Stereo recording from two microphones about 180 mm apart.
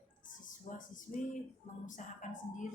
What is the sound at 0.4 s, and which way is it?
A woman's voice, 45° left (ahead or behind).